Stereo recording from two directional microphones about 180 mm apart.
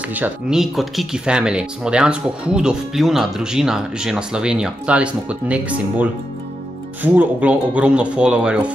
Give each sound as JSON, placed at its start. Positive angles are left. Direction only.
{"t": 0.1, "sound": "speech", "side_deg": -5}